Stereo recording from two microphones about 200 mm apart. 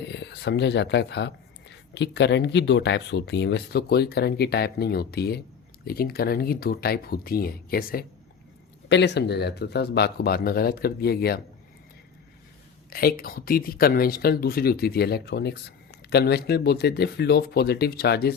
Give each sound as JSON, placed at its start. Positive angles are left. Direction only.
{"t": 0.1, "sound": "speech", "side_deg": 60}
{"t": 8.9, "sound": "speech", "side_deg": 60}
{"t": 12.9, "sound": "speech", "side_deg": 45}